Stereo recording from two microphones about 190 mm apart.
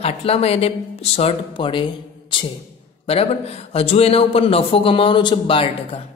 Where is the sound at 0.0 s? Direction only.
30° left (ahead or behind).